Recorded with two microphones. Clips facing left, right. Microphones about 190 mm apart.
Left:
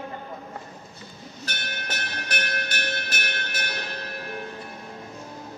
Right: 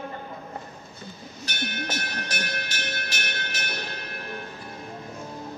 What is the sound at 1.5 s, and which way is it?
Music, 60° left (ahead or behind).